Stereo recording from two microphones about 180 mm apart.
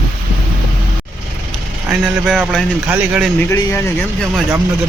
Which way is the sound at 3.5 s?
15° left (ahead or behind).